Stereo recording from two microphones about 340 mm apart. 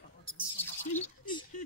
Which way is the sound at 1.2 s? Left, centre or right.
Centre.